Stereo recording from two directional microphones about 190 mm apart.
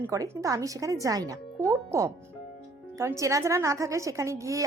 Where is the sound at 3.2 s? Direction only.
15° right (ahead or behind).